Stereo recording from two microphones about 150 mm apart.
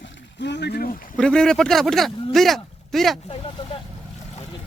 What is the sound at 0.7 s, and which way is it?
Speech, 85° left.